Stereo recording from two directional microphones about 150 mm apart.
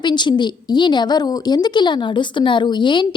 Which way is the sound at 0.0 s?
30° left (ahead or behind).